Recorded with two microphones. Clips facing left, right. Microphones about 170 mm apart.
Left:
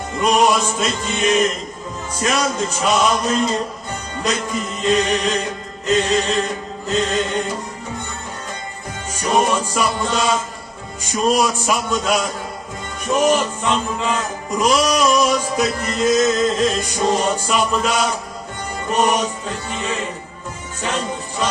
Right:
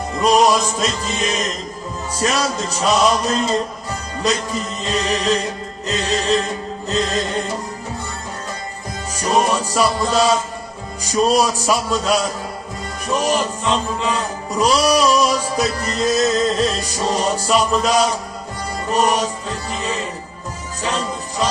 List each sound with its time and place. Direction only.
0.2 s male singing: 35° right (ahead or behind)
9.1 s male singing: 35° right (ahead or behind)
20.8 s music: 35° right (ahead or behind)